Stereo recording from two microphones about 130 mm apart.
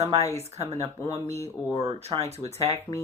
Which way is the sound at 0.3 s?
55° right (ahead or behind).